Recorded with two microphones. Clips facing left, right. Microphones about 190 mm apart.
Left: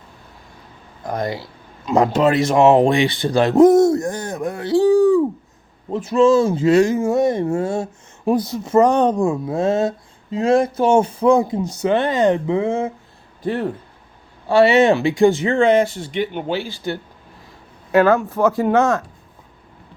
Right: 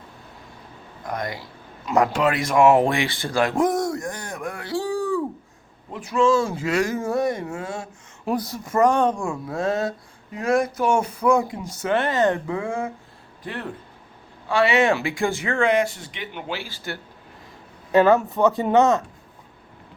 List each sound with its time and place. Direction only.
1.0 s speech: 30° left (ahead or behind)
13.4 s speech: 40° left (ahead or behind); by 17.0 s 20° left (ahead or behind)
18.0 s speech: centre (ahead or behind)